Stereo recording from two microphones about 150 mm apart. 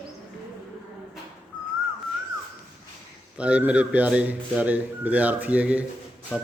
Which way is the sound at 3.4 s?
10° right (ahead or behind).